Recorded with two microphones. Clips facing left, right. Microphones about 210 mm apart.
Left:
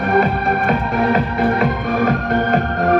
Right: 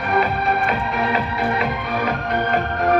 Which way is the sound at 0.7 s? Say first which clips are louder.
Left 5 dB; 45° left (ahead or behind).